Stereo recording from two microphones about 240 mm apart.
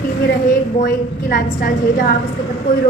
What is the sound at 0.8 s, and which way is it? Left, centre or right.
A woman's voice, left.